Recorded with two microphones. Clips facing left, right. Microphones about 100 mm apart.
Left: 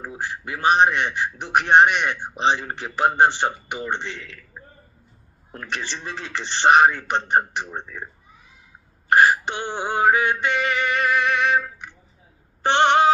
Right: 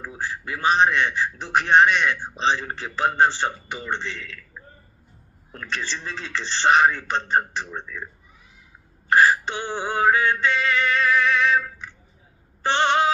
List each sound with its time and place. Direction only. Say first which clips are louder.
0.0 s a man's voice: left 1 dB; 20° left (ahead or behind)
5.5 s a man's voice: even; 15° left (ahead or behind)
9.1 s a man's voice: left 1 dB; 20° left (ahead or behind)
11.3 s music: even; 15° left (ahead or behind)
12.6 s a sound: left 3 dB; 20° left (ahead or behind)